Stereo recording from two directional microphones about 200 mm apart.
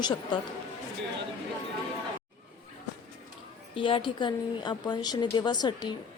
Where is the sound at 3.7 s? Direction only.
25° left (ahead or behind).